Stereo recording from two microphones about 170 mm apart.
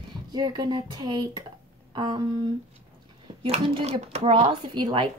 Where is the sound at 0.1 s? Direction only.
25° right (ahead or behind).